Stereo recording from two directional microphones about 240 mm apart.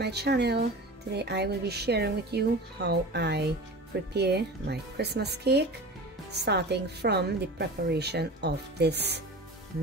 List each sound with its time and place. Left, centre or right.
0.0 s a woman's voice: right